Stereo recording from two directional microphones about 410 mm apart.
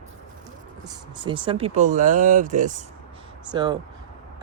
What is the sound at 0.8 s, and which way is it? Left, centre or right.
Speech, centre.